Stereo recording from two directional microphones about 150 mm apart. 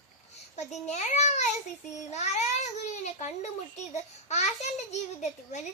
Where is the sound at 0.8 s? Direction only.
50° left (ahead or behind).